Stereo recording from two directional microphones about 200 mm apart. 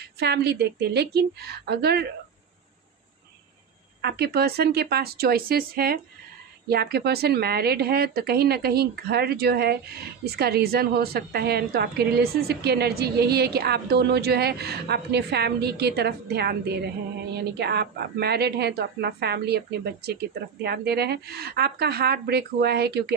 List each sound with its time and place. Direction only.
0.2 s speech: 55° right (ahead or behind)
4.0 s speech: 55° right (ahead or behind)